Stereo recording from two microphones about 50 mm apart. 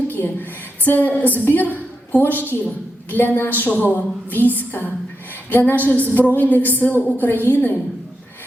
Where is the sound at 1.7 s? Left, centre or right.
Left.